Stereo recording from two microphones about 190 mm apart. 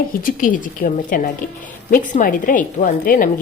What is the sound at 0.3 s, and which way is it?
A woman's voice, 45° left (ahead or behind).